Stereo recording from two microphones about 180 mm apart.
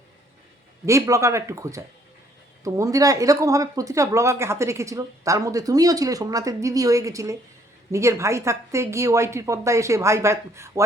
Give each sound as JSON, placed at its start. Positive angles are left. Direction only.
{"t": 0.9, "sound": "speech", "side_deg": -15}